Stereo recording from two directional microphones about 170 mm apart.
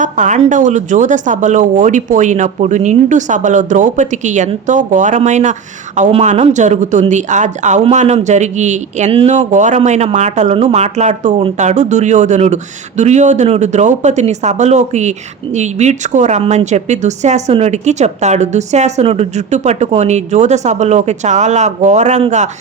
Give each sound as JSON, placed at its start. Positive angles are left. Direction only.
{"t": 0.0, "sound": "a woman's voice", "side_deg": -45}